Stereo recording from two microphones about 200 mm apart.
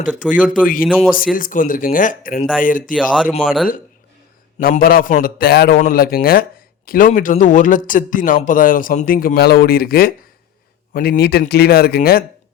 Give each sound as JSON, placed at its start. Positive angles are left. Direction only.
{"t": 0.2, "sound": "speech", "side_deg": -5}
{"t": 1.1, "sound": "speech", "side_deg": 45}
{"t": 2.9, "sound": "speech", "side_deg": 0}
{"t": 4.6, "sound": "speech", "side_deg": 45}